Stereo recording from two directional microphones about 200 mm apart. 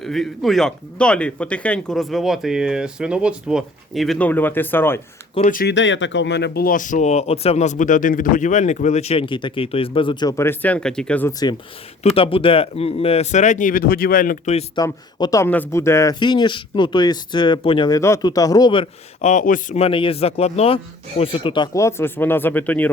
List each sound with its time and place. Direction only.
0.0 s speech: centre (ahead or behind)
5.5 s speech: 45° left (ahead or behind)
5.7 s speech: 65° left (ahead or behind); by 14.6 s 40° left (ahead or behind)
14.8 s speech: 20° left (ahead or behind)